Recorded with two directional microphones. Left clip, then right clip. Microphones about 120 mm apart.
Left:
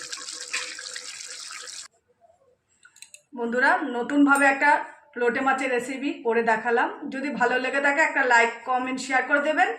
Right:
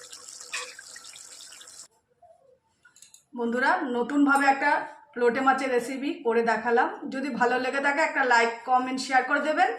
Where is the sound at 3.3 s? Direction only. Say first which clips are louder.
Left 3 dB; 35° left (ahead or behind).